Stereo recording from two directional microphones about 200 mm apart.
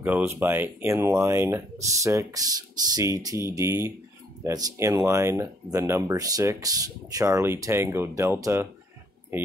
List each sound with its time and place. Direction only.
0.0 s speech: 10° right (ahead or behind)